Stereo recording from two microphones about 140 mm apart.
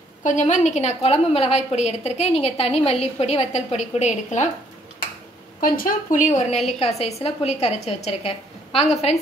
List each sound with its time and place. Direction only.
0.2 s a woman's voice: 60° left (ahead or behind)
5.6 s a woman's voice: 80° left
6.3 s a woman's voice: 55° left (ahead or behind)